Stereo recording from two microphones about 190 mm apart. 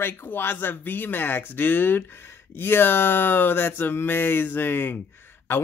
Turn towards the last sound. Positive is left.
turn(degrees=10)  # may be behind; listen again after turning